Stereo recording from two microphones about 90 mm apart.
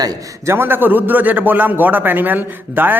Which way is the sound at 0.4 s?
25° right (ahead or behind).